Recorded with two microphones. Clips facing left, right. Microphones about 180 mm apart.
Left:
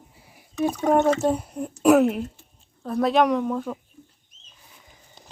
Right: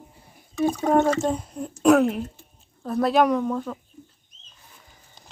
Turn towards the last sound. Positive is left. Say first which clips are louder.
# even
turn(degrees=5)  # may be behind; listen again after turning